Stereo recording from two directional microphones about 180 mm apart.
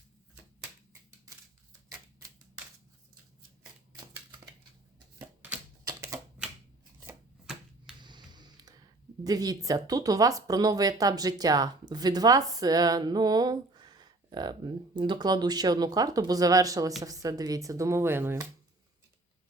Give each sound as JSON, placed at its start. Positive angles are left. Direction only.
{"t": 5.4, "sound": "typewriter", "side_deg": -10}
{"t": 8.0, "sound": "speech", "side_deg": -25}